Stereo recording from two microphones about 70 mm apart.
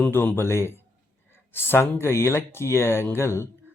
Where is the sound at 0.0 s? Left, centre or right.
Left.